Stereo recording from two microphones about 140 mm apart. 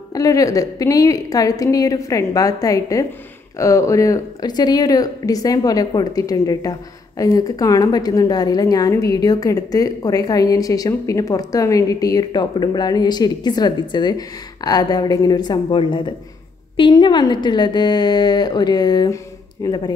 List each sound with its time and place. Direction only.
0.1 s a woman's voice: 25° left (ahead or behind)